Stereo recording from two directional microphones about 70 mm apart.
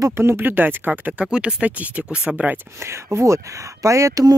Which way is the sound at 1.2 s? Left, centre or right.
Centre.